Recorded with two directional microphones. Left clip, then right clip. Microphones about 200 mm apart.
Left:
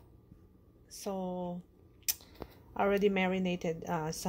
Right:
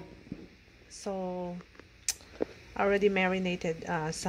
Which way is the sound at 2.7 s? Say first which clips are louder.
Right 3 dB; 5° right (ahead or behind).